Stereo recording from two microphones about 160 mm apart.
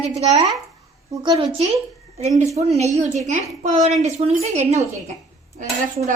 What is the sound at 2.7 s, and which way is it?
A woman's voice, 45° right (ahead or behind).